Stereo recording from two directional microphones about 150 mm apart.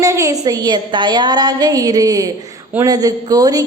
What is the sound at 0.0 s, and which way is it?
A woman's voice, 20° right (ahead or behind).